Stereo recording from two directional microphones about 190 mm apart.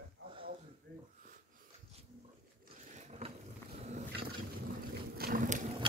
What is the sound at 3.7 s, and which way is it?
Roaring cats, 35° right (ahead or behind).